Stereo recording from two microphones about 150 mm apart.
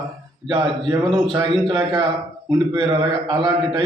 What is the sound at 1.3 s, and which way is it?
Speech, 30° right (ahead or behind).